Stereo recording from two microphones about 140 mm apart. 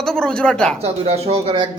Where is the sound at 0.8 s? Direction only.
50° right (ahead or behind).